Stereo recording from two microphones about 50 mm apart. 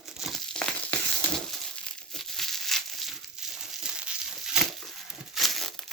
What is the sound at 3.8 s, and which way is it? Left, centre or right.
Crumpling, centre.